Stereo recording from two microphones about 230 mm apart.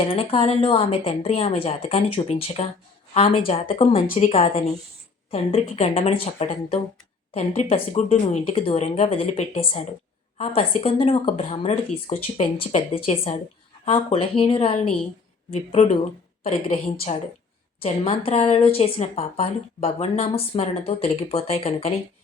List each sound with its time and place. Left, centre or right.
0.2 s a woman's voice: left
4.0 s a woman's voice: left
4.3 s a woman's voice: left